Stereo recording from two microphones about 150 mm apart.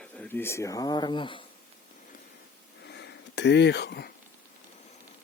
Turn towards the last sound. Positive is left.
turn(degrees=90)